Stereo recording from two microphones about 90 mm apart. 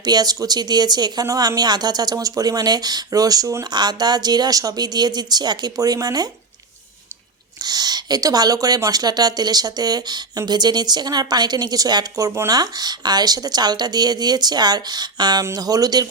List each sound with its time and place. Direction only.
0.0 s speech: 50° right (ahead or behind)
3.7 s speech: 55° right (ahead or behind)
7.6 s speech: 45° right (ahead or behind)